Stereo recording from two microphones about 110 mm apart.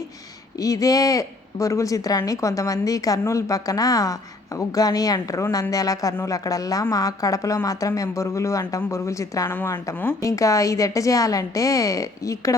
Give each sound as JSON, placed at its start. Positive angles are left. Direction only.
{"t": 0.6, "sound": "speech", "side_deg": 30}
{"t": 9.5, "sound": "speech", "side_deg": 20}